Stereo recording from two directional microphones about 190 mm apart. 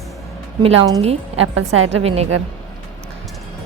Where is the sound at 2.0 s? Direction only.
35° right (ahead or behind).